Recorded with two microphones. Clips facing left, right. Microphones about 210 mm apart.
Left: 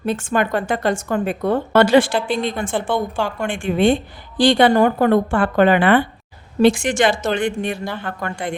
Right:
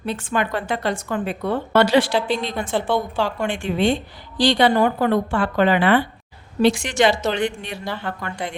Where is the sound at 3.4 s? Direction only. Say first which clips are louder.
Left 5 dB; 50° left (ahead or behind).